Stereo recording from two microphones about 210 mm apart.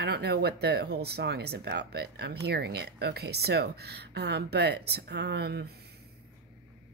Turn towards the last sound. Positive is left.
turn(degrees=-50)  # may be behind; listen again after turning